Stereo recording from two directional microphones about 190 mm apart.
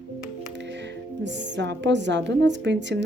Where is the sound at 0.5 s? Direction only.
65° right (ahead or behind).